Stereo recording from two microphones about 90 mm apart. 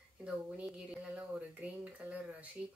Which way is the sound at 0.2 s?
15° right (ahead or behind).